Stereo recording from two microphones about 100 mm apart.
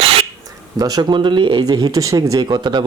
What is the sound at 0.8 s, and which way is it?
Speech, 45° right (ahead or behind).